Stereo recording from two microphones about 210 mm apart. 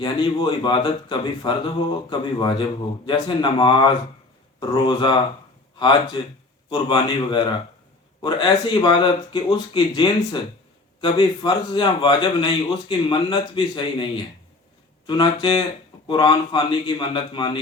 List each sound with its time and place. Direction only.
0.0 s speech: 20° left (ahead or behind)